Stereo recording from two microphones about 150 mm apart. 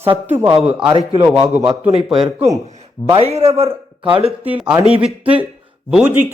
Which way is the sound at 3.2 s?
40° right (ahead or behind).